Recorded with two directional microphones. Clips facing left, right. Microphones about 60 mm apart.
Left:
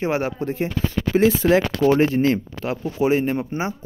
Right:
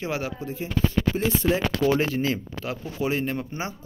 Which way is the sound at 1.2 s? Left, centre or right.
Left.